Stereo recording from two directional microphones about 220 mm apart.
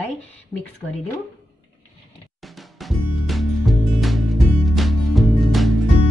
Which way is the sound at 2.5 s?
Centre (ahead or behind).